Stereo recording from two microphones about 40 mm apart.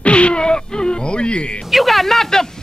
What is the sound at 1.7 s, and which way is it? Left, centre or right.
Speech, centre.